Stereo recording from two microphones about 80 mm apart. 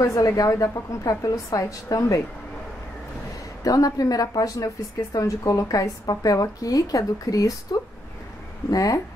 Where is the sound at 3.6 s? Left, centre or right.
Left.